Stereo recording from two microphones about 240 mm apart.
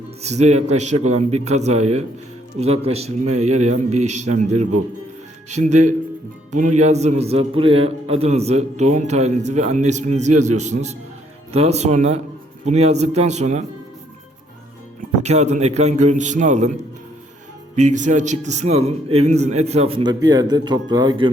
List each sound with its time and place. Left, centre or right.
0.2 s a man's voice: right
15.2 s a man's voice: right
17.7 s a man's voice: right